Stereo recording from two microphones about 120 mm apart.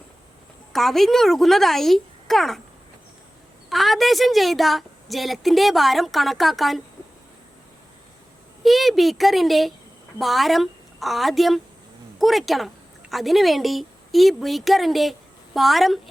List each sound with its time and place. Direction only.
0.7 s a woman's voice: centre (ahead or behind)
3.7 s a woman's voice: centre (ahead or behind)
8.6 s a woman's voice: centre (ahead or behind)